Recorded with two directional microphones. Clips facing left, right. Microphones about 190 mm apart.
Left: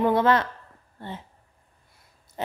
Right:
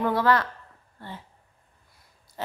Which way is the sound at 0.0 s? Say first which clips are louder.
Left 2 dB; 20° left (ahead or behind).